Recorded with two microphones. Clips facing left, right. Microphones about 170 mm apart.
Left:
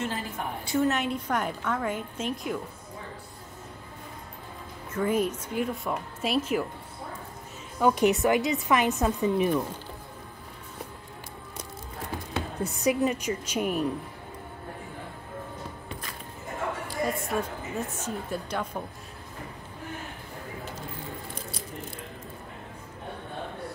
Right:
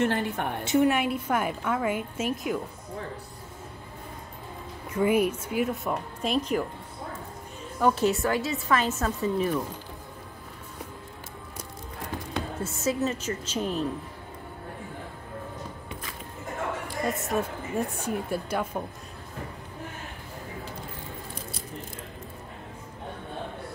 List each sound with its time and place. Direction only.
0.0 s a woman's voice: 65° right (ahead or behind)
0.7 s a woman's voice: 15° right (ahead or behind)
4.9 s speech: 10° right (ahead or behind)
7.8 s a woman's voice: 15° left (ahead or behind)
12.6 s a woman's voice: 15° left (ahead or behind)
16.8 s chatter: 20° right (ahead or behind)
17.7 s a woman's voice: 10° right (ahead or behind)